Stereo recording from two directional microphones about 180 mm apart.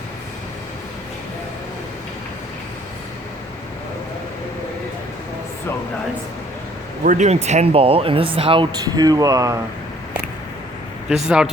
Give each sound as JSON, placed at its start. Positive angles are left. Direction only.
{"t": 7.0, "sound": "speech", "side_deg": -45}
{"t": 11.1, "sound": "speech", "side_deg": -5}